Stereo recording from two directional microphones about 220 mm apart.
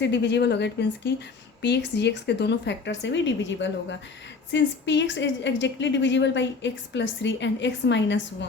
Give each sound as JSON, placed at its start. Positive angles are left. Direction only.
{"t": 0.0, "sound": "a woman's voice", "side_deg": 55}